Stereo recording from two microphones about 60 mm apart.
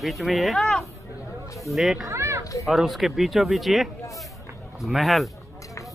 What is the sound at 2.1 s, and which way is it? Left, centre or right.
Children playing, right.